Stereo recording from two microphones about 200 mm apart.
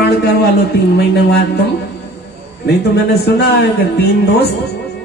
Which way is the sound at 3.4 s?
55° left (ahead or behind).